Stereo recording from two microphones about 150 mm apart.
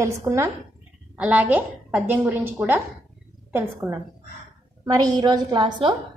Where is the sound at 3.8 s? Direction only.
Centre (ahead or behind).